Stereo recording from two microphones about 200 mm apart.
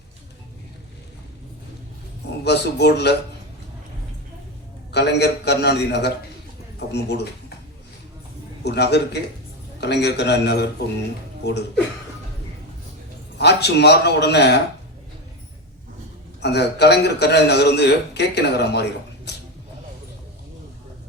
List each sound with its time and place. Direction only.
2.4 s speech: 55° left (ahead or behind)
4.9 s speech: 55° left (ahead or behind)
8.6 s speech: 55° left (ahead or behind)
13.4 s speech: 55° left (ahead or behind)
16.4 s speech: 55° left (ahead or behind)